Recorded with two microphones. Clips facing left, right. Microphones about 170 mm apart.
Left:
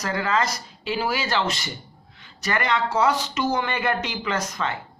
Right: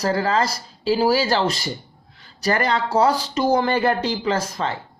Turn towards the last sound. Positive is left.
turn(degrees=-30)  # may be behind; listen again after turning